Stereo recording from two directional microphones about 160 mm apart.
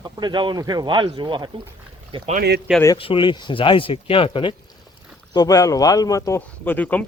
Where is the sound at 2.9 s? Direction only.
35° left (ahead or behind).